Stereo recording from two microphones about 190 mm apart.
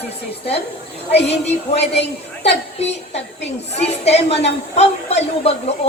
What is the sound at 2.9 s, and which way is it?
A woman's voice, 35° left (ahead or behind).